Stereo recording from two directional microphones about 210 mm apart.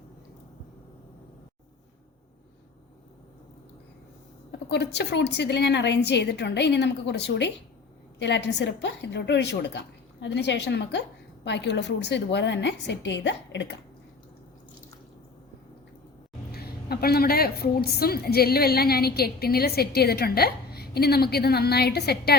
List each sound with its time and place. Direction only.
4.7 s a woman's voice: 55° left (ahead or behind)
16.5 s a woman's voice: 50° left (ahead or behind)